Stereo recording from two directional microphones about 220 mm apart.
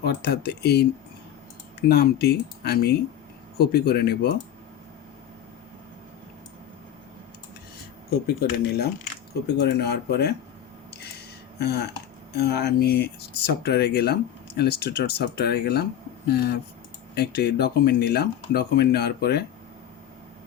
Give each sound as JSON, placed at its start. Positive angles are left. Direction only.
{"t": 0.0, "sound": "speech", "side_deg": 45}
{"t": 1.9, "sound": "speech", "side_deg": 45}
{"t": 8.1, "sound": "speech", "side_deg": 45}
{"t": 11.6, "sound": "speech", "side_deg": 45}